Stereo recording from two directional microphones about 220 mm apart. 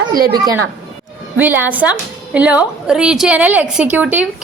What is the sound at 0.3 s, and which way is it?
Speech, 20° right (ahead or behind).